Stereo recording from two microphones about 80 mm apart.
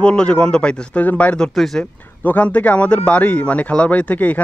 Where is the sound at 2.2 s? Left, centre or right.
Centre.